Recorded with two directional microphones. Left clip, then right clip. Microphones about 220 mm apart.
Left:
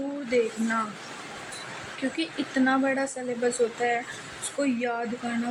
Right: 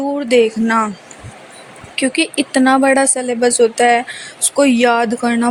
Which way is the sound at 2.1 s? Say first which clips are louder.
Right 13 dB; 40° right (ahead or behind).